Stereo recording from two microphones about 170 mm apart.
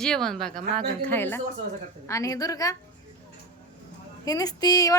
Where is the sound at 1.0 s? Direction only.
10° left (ahead or behind).